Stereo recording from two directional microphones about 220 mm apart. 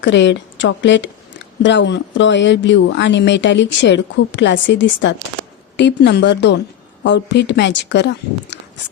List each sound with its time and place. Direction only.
0.0 s speech: 55° left (ahead or behind)